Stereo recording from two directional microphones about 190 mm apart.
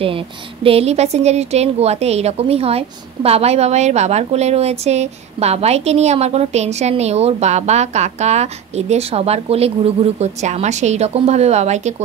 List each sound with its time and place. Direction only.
0.7 s a woman's voice: 35° right (ahead or behind)